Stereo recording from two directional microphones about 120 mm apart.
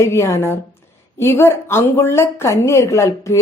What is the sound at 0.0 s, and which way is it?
A woman's voice, 25° left (ahead or behind).